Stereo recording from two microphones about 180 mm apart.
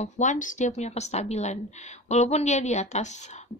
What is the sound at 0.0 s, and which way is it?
Speech, 40° left (ahead or behind).